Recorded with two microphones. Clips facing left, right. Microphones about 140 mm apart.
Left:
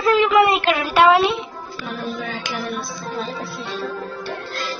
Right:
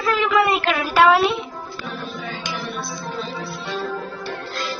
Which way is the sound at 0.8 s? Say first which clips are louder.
Even; centre (ahead or behind).